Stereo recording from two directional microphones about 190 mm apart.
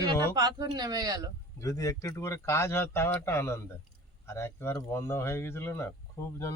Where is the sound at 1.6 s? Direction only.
15° left (ahead or behind).